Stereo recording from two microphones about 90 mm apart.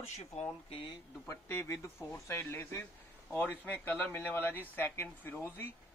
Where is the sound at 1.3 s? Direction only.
30° left (ahead or behind).